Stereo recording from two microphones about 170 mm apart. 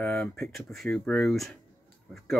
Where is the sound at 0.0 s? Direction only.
5° left (ahead or behind).